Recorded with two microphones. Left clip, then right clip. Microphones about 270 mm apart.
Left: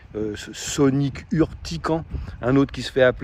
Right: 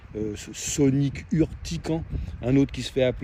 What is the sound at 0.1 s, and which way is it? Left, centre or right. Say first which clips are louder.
Speech: left 4 dB; centre.